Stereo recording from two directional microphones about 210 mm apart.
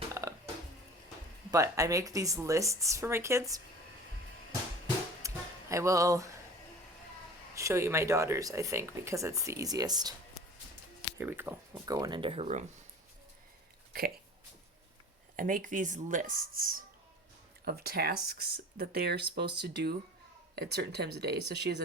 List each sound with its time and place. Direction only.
0.1 s a sound: 15° right (ahead or behind)
1.5 s speech: 15° right (ahead or behind)
5.2 s music: 15° right (ahead or behind)
7.5 s speech: 15° right (ahead or behind)
11.2 s speech: 10° right (ahead or behind); by 12.6 s 30° right (ahead or behind)
15.4 s speech: 40° right (ahead or behind)